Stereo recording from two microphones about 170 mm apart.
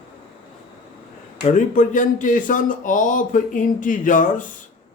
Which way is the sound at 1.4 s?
50° left (ahead or behind).